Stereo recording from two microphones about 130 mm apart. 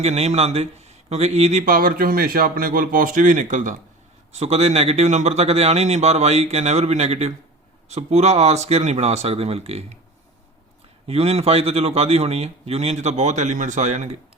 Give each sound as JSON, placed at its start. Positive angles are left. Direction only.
{"t": 0.0, "sound": "speech", "side_deg": -55}
{"t": 4.3, "sound": "speech", "side_deg": -55}
{"t": 11.0, "sound": "a man's voice", "side_deg": -50}